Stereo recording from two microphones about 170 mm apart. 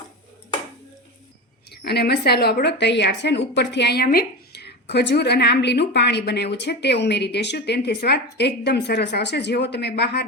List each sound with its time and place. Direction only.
1.7 s a woman's voice: 75° left (ahead or behind)